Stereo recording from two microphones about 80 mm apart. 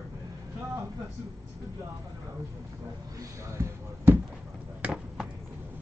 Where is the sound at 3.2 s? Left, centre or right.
Right.